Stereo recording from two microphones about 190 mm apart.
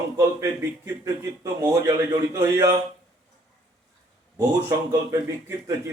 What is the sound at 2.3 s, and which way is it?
Speech, 15° right (ahead or behind).